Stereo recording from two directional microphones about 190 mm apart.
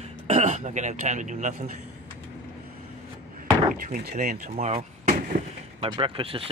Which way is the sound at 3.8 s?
45° right (ahead or behind).